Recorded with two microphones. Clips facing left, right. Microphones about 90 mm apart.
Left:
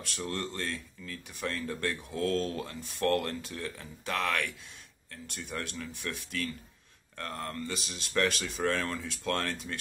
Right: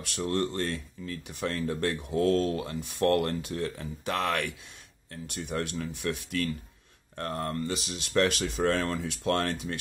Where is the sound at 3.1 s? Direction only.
45° right (ahead or behind).